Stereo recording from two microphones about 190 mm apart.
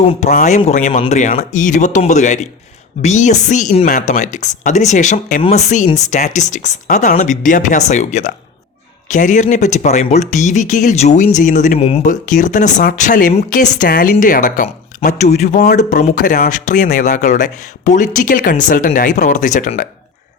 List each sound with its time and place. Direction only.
0.0 s speech: 35° left (ahead or behind)
11.8 s speech: 30° left (ahead or behind)
12.2 s speech: 45° left (ahead or behind)